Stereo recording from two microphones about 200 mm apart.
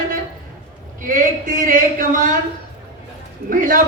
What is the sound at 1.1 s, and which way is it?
Speech, 40° right (ahead or behind).